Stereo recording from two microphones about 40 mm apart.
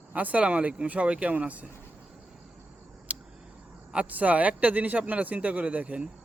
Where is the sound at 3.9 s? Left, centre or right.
Right.